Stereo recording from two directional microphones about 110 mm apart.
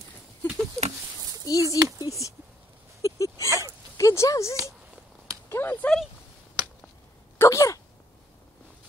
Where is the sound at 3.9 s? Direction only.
25° left (ahead or behind).